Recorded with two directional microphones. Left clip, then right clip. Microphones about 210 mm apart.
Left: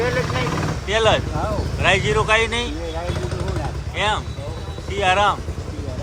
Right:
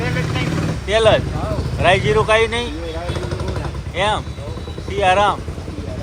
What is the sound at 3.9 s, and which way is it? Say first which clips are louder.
Speech: right 3 dB; 10° left (ahead or behind).